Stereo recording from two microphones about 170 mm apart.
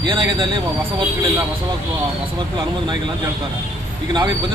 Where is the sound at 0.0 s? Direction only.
25° right (ahead or behind).